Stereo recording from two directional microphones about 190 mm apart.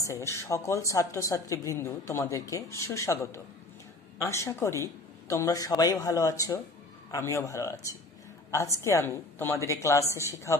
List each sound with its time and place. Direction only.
0.0 s a woman's voice: 15° left (ahead or behind)
4.2 s a woman's voice: 15° left (ahead or behind)